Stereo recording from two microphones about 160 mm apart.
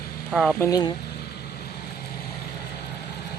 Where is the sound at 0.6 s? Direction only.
20° left (ahead or behind).